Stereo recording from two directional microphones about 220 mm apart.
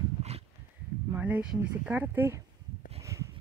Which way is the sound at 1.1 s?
5° right (ahead or behind).